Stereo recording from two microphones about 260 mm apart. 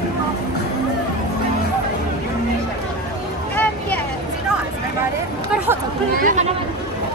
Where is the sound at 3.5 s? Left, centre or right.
Centre.